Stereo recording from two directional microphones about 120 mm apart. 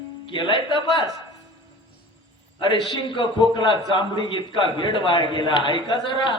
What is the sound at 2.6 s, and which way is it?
A man's voice, 45° left (ahead or behind).